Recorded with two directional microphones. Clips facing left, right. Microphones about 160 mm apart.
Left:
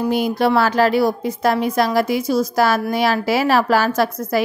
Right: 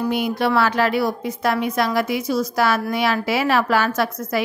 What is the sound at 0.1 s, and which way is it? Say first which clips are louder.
A woman's voice: left 4 dB; 35° left (ahead or behind).